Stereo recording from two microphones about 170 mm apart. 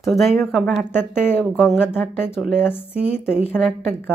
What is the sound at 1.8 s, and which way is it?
Speech, 15° left (ahead or behind).